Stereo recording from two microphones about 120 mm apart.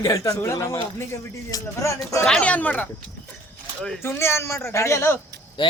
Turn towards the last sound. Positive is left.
turn(degrees=25)  # may be behind; listen again after turning